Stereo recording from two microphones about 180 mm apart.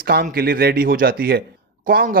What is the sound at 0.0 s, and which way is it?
A man's voice, 55° right (ahead or behind).